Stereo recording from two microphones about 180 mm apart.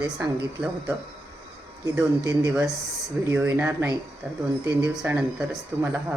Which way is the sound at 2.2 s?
20° right (ahead or behind).